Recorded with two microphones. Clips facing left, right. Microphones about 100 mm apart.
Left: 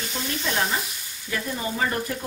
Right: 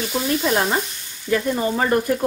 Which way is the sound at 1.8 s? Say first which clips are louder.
Right 6 dB; 50° right (ahead or behind).